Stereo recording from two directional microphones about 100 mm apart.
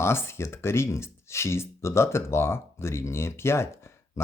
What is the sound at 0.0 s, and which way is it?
Speech, 25° left (ahead or behind).